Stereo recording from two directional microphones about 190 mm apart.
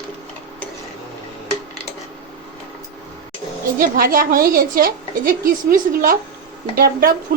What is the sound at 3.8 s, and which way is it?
A woman's voice, 50° right (ahead or behind).